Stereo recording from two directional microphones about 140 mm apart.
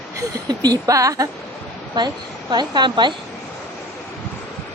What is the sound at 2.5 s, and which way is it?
Speech, 30° right (ahead or behind).